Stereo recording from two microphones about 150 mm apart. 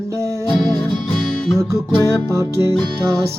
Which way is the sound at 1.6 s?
20° right (ahead or behind).